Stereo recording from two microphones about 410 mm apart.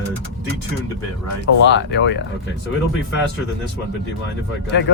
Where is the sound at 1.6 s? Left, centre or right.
Left.